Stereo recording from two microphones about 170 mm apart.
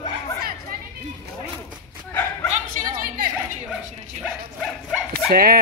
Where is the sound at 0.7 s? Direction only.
60° right (ahead or behind).